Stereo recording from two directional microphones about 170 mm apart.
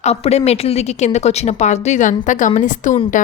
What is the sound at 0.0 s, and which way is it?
A woman's voice, 40° left (ahead or behind).